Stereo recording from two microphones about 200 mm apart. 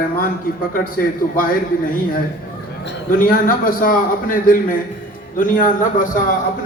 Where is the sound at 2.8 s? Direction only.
45° left (ahead or behind).